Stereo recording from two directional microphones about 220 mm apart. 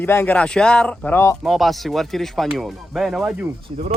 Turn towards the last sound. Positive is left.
turn(degrees=-30)  # may be behind; listen again after turning